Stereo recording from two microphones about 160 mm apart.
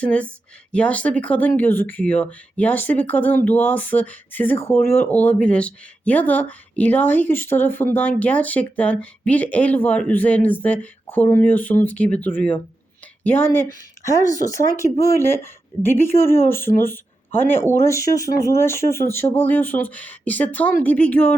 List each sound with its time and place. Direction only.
0.0 s speech: 10° left (ahead or behind)
14.0 s speech: 20° left (ahead or behind)